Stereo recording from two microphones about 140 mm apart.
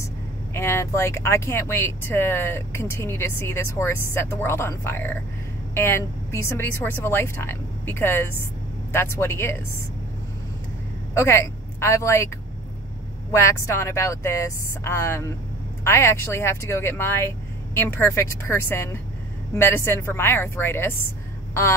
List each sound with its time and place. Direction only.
0.5 s speech: 20° left (ahead or behind)
11.1 s speech: 20° left (ahead or behind)
13.3 s speech: 20° left (ahead or behind)